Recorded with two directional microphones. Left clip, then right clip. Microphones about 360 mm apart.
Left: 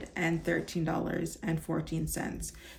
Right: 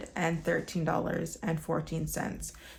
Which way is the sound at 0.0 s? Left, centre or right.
Centre.